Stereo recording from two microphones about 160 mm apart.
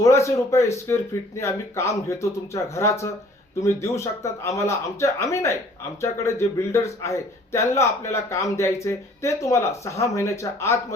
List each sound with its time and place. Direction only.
0.0 s speech: 20° left (ahead or behind)